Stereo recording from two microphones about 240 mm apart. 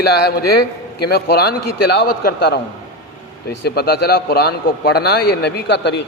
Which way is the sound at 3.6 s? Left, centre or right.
Left.